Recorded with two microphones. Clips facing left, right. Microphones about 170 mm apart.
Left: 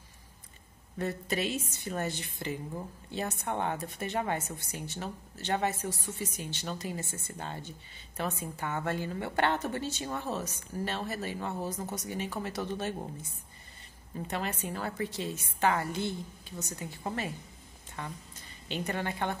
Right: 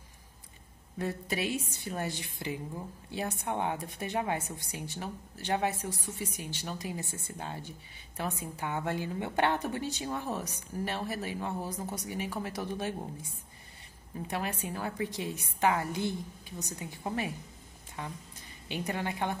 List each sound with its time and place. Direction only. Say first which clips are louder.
0.9 s a woman's voice: left 1 dB; 10° right (ahead or behind)
14.2 s a woman's voice: even; 10° right (ahead or behind)